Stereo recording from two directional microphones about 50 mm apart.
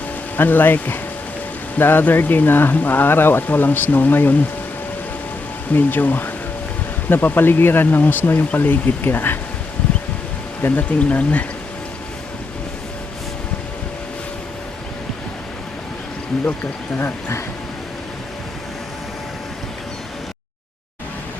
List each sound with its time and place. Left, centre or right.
0.3 s speech: left
5.7 s speech: left
10.6 s speech: left
17.0 s speech: left